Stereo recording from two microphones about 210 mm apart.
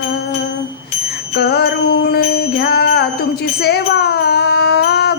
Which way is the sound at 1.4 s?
50° left (ahead or behind).